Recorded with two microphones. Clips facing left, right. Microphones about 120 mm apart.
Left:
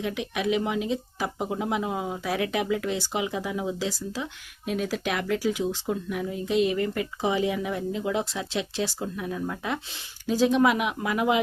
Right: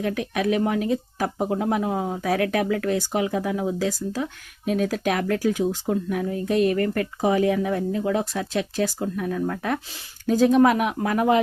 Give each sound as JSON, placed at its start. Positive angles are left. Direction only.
{"t": 0.0, "sound": "speech", "side_deg": -50}
{"t": 2.2, "sound": "speech", "side_deg": -50}